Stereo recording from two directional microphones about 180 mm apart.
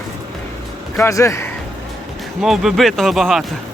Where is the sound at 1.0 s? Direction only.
15° left (ahead or behind).